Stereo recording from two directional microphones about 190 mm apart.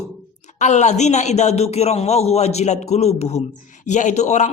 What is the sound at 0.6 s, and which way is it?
A man's voice, 40° left (ahead or behind).